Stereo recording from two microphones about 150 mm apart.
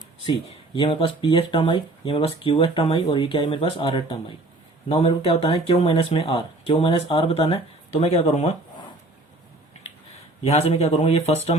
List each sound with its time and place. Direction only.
0.4 s speech: 35° left (ahead or behind)
10.4 s speech: 40° left (ahead or behind)